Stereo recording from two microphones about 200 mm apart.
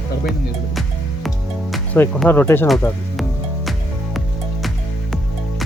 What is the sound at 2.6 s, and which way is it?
Speech, centre (ahead or behind).